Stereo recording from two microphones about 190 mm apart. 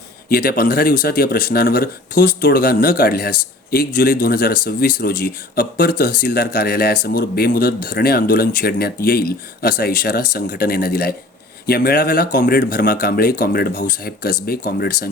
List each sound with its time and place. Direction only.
0.3 s speech: 50° left (ahead or behind)